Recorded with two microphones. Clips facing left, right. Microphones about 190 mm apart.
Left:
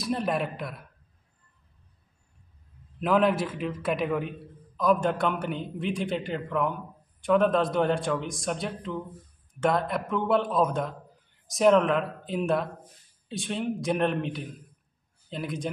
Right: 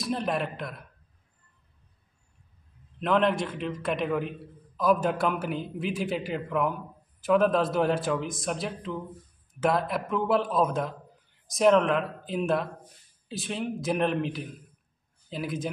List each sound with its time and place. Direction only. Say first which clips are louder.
0.0 s a man's voice: left 1 dB; centre (ahead or behind)
3.0 s a man's voice: left 1 dB; 5° left (ahead or behind)